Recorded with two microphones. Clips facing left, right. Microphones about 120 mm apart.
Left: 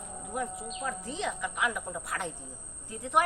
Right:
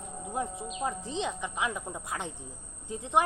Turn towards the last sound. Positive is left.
turn(degrees=-20)  # may be behind; listen again after turning